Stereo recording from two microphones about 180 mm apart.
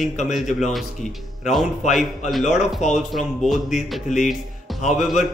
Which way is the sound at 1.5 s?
Centre (ahead or behind).